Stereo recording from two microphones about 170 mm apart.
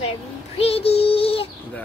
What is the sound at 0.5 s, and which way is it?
Child singing, 35° left (ahead or behind).